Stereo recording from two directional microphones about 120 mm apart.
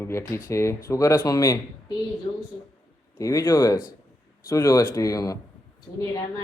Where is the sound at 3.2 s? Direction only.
30° left (ahead or behind).